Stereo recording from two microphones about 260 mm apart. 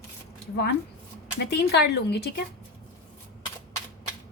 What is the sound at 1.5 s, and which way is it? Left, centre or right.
Speech, left.